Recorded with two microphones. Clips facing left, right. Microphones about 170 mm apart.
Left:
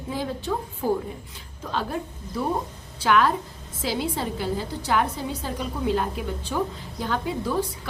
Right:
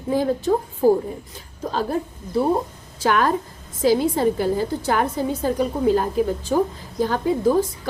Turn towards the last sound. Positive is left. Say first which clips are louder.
# right 7 dB
turn(degrees=-45)  # may be behind; listen again after turning